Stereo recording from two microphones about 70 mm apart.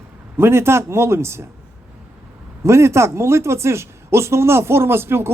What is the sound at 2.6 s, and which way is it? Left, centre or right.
Speech, right.